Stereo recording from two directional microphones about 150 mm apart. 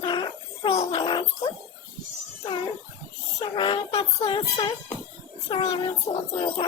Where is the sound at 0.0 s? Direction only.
30° left (ahead or behind).